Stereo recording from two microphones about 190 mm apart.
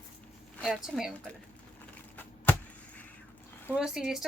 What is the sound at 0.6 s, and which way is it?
Speech, centre (ahead or behind).